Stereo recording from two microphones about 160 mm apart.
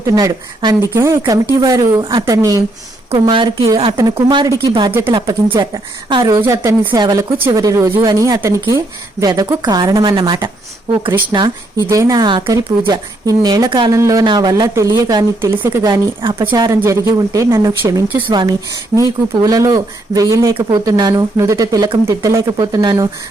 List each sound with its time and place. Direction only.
0.0 s speech: 20° right (ahead or behind)
5.6 s speech: 20° right (ahead or behind)
6.3 s speech: 15° right (ahead or behind)
15.8 s speech: 30° right (ahead or behind)
16.6 s speech: 20° right (ahead or behind)